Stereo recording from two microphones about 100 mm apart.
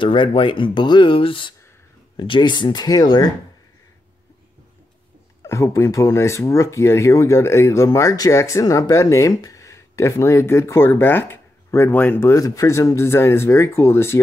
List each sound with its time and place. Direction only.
0.0 s speech: 55° left (ahead or behind)
5.4 s speech: 30° left (ahead or behind)